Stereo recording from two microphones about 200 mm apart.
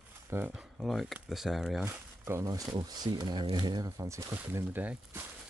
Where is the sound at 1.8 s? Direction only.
15° right (ahead or behind).